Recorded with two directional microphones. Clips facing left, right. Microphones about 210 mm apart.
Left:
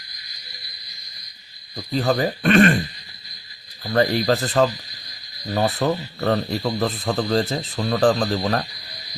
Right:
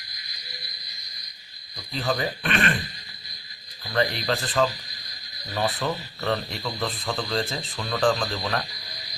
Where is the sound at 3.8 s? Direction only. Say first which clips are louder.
Left 6 dB; 45° left (ahead or behind).